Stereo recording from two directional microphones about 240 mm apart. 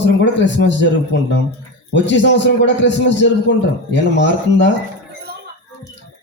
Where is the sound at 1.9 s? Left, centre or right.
Left.